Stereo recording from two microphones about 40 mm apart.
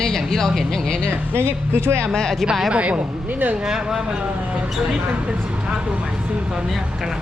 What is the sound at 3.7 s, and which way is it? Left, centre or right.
Speech, centre.